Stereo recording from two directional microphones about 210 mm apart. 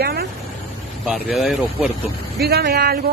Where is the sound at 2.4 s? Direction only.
50° right (ahead or behind).